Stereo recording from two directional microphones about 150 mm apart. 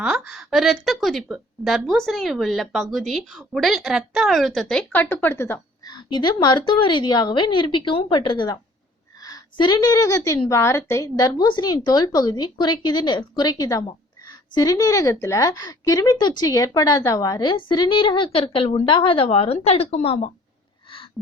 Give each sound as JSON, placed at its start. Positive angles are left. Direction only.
{"t": 0.0, "sound": "a woman's voice", "side_deg": -5}
{"t": 5.9, "sound": "a woman's voice", "side_deg": 30}